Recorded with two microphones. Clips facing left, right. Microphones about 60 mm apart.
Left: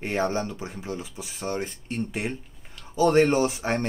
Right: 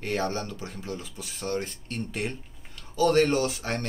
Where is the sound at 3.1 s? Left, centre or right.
Centre.